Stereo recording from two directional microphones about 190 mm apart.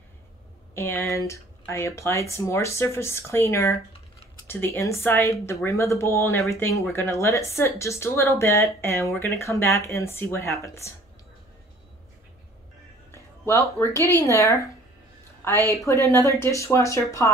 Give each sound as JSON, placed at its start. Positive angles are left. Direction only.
{"t": 0.7, "sound": "speech", "side_deg": 15}
{"t": 13.1, "sound": "speech", "side_deg": 15}
{"t": 15.7, "sound": "speech", "side_deg": 15}